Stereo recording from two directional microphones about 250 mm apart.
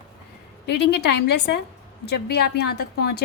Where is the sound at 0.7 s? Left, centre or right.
Left.